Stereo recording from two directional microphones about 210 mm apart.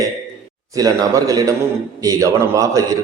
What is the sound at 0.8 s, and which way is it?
A man's voice, 15° right (ahead or behind).